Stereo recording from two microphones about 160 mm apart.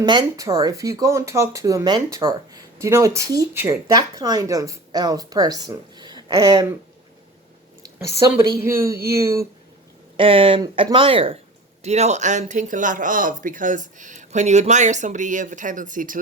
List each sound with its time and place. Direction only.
0.0 s speech: 25° right (ahead or behind)
8.4 s speech: 15° right (ahead or behind)
10.2 s speech: 35° right (ahead or behind); by 16.1 s 55° right (ahead or behind)